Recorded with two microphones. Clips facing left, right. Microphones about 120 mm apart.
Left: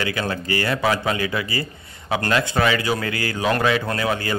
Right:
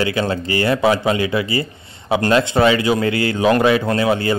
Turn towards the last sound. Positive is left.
turn(degrees=-25)  # may be behind; listen again after turning